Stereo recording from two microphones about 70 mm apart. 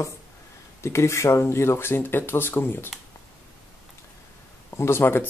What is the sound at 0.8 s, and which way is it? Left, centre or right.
Speech, left.